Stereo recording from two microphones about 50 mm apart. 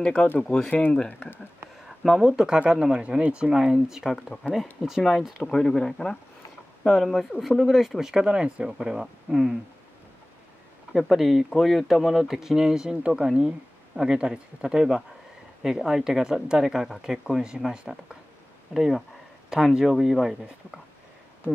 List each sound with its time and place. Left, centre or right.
0.0 s speech: centre
2.0 s speech: centre
3.5 s speech: centre
4.3 s speech: centre
5.4 s speech: centre
6.9 s speech: centre
10.9 s speech: centre